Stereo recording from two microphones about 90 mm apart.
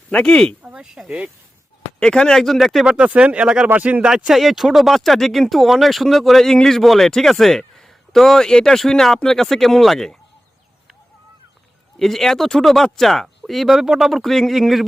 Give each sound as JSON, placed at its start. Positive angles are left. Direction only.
{"t": 0.1, "sound": "speech", "side_deg": 10}
{"t": 0.6, "sound": "speech", "side_deg": -10}
{"t": 2.0, "sound": "speech", "side_deg": 10}
{"t": 2.8, "sound": "speech", "side_deg": -10}
{"t": 4.1, "sound": "speech", "side_deg": -5}
{"t": 11.9, "sound": "speech", "side_deg": 5}